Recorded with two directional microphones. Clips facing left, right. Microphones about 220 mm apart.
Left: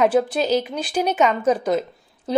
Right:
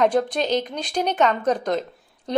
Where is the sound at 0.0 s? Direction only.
5° left (ahead or behind).